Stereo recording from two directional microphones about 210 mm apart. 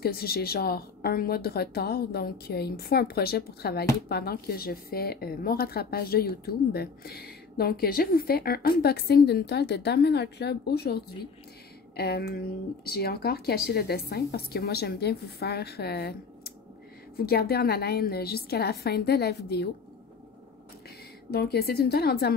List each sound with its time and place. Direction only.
0.0 s a woman's voice: 45° left (ahead or behind)
12.0 s a woman's voice: 50° left (ahead or behind)
21.3 s a woman's voice: 50° left (ahead or behind)